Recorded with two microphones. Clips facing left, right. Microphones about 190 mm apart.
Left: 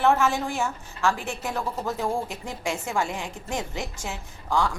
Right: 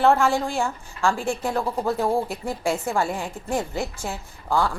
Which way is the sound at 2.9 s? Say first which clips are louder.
Right 3 dB; 45° right (ahead or behind).